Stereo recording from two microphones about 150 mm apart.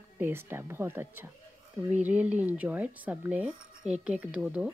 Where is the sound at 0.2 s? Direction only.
15° right (ahead or behind).